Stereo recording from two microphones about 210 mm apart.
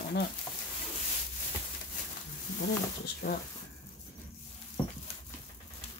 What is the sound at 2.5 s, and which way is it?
Speech, 40° left (ahead or behind).